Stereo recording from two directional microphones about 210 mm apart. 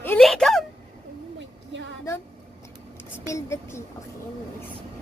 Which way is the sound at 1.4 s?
60° right (ahead or behind).